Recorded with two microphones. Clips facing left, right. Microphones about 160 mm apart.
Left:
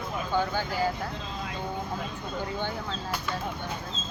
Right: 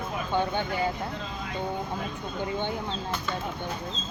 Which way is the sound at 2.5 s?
20° right (ahead or behind).